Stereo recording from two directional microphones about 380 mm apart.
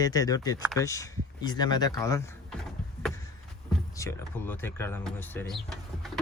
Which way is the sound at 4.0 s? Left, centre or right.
Centre.